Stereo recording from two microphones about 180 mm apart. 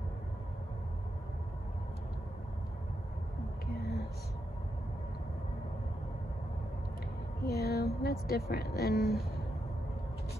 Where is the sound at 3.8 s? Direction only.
65° left (ahead or behind).